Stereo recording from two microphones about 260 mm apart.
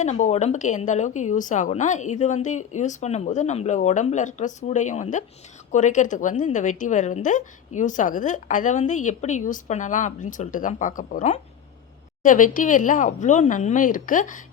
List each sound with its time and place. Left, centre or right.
0.0 s a woman's voice: left